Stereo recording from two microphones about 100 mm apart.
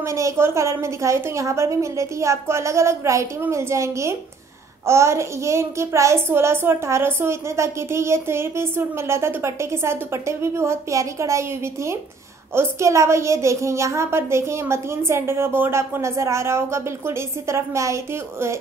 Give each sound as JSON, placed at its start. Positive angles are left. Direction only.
{"t": 0.0, "sound": "a child's voice", "side_deg": -30}